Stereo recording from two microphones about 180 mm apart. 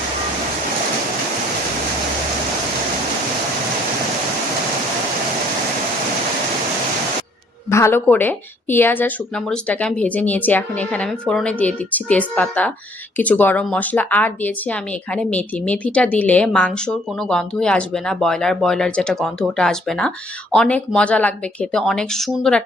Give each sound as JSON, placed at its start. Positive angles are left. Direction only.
{"t": 7.7, "sound": "speech", "side_deg": 15}